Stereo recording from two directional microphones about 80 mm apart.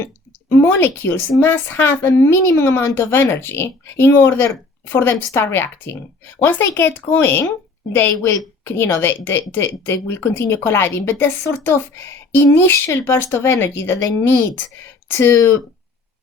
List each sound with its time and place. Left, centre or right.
0.6 s a woman's voice: left
15.1 s speech: left